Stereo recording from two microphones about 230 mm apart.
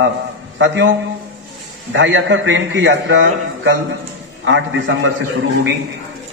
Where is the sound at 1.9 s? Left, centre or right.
Right.